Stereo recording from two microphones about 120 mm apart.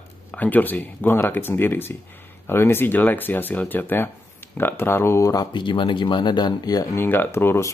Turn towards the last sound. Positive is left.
turn(degrees=20)  # may be behind; listen again after turning